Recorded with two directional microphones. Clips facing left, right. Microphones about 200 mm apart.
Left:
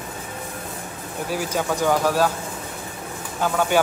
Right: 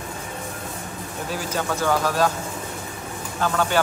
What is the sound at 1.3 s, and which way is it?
A man's voice, 10° left (ahead or behind).